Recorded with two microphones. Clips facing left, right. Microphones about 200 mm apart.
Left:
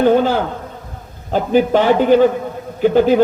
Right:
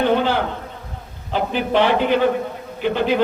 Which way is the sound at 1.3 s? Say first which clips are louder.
Left 6 dB; 45° left (ahead or behind).